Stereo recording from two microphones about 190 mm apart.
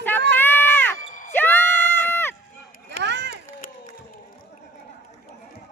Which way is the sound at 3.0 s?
65° right (ahead or behind).